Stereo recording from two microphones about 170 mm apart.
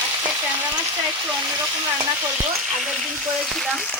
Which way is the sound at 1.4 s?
20° right (ahead or behind).